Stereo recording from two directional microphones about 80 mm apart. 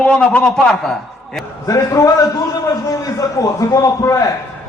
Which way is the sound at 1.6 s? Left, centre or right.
Left.